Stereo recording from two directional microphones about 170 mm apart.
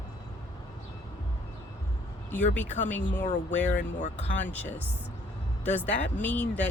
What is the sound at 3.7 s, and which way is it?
Speech, 50° left (ahead or behind).